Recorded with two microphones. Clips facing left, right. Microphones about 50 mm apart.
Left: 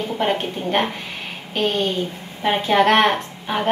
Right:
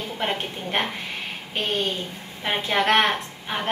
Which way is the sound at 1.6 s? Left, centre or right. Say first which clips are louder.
Left 5 dB; left.